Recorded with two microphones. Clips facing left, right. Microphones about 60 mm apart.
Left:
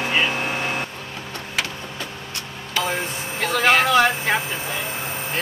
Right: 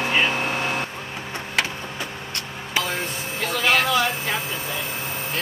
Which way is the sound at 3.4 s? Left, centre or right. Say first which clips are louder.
Left 3 dB; left.